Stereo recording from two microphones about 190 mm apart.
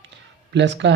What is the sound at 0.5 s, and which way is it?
Speech, 70° right (ahead or behind).